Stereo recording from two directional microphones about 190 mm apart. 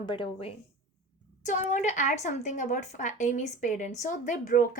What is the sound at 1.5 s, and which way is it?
A woman's voice, 40° left (ahead or behind).